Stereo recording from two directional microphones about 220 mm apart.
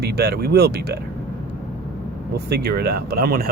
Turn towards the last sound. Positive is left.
turn(degrees=-45)  # may be behind; listen again after turning